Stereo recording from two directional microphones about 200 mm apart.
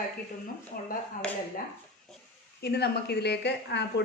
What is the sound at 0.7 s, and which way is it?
Speech, 45° left (ahead or behind).